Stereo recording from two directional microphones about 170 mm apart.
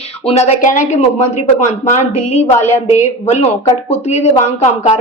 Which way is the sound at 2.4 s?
15° left (ahead or behind).